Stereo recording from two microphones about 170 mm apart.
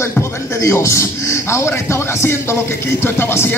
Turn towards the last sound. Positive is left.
turn(degrees=15)  # may be behind; listen again after turning